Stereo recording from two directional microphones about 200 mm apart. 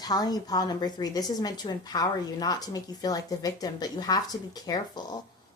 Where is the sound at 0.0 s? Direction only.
20° left (ahead or behind).